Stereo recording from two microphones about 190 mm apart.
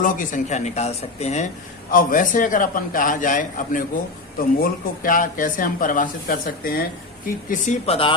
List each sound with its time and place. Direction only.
0.0 s speech: 45° left (ahead or behind)
1.9 s speech: 45° left (ahead or behind)
7.6 s speech: 35° left (ahead or behind)